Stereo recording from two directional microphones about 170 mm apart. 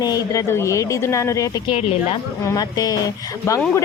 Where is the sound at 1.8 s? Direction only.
35° left (ahead or behind).